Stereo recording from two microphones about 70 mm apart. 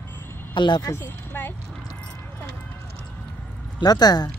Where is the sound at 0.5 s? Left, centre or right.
Left.